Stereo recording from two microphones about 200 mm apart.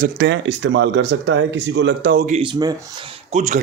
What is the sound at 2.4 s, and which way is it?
Speech, 15° right (ahead or behind).